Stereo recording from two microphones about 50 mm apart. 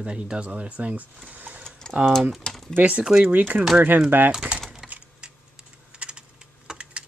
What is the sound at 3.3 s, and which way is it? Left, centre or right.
Speech, right.